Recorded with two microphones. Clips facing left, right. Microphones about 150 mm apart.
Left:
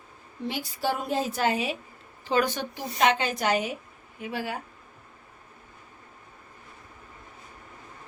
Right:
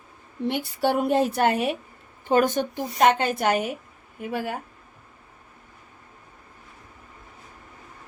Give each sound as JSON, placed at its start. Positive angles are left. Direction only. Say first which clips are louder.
{"t": 0.4, "sound": "a woman's voice", "louder": "right 5 dB", "side_deg": -60}
{"t": 2.2, "sound": "a woman's voice", "louder": "right 5 dB", "side_deg": -50}